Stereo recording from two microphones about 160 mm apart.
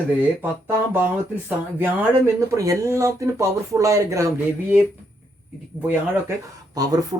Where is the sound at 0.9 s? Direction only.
10° right (ahead or behind).